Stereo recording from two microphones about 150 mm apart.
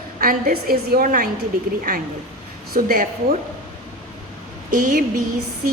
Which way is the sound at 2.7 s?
80° right.